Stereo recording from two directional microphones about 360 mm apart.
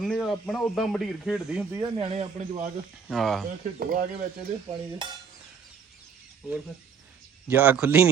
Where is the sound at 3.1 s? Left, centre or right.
Centre.